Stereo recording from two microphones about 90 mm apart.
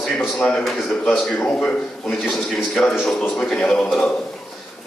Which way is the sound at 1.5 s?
15° left (ahead or behind).